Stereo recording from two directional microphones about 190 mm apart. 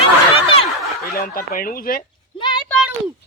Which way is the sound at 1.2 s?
50° left (ahead or behind).